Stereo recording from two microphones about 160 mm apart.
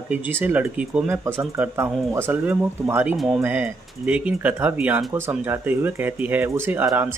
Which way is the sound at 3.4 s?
10° right (ahead or behind).